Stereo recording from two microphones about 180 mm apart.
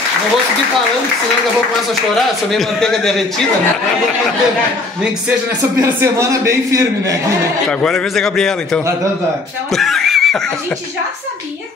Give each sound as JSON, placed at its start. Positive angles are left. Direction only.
{"t": 2.5, "sound": "a man's voice", "side_deg": 5}
{"t": 5.6, "sound": "a man's voice", "side_deg": -15}
{"t": 7.8, "sound": "a man's voice", "side_deg": 5}
{"t": 9.7, "sound": "a sound", "side_deg": 0}